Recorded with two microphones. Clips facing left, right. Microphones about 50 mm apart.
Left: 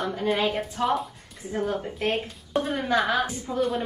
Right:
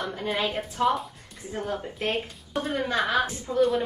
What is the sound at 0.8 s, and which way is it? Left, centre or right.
Speech, centre.